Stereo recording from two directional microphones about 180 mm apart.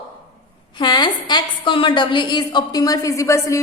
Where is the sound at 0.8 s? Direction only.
25° left (ahead or behind).